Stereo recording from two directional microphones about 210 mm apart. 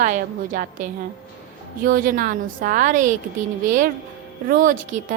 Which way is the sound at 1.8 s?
40° right (ahead or behind).